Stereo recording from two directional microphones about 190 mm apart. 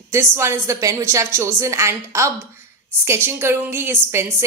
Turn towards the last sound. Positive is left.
turn(degrees=-15)  # may be behind; listen again after turning